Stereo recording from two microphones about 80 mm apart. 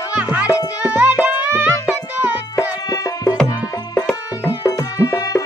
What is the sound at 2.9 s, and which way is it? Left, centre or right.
Music, left.